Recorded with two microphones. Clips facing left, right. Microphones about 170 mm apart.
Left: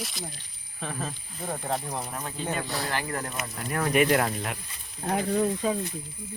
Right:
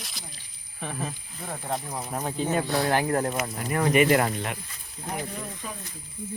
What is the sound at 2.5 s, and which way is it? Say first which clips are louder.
Speech: right 9 dB; 45° right (ahead or behind).